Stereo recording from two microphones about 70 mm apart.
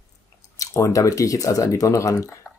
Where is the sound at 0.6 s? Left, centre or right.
Left.